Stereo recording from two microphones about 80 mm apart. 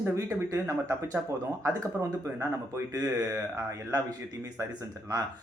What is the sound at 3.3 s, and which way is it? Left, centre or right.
Speech, right.